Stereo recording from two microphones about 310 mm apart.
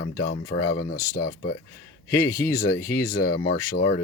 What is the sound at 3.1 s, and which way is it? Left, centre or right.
Speech, left.